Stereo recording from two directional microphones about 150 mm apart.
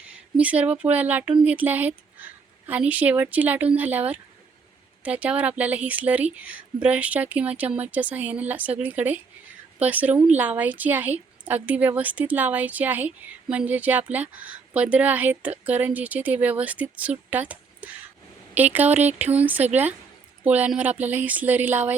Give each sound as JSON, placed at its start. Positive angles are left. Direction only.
{"t": 0.0, "sound": "a woman's voice", "side_deg": -10}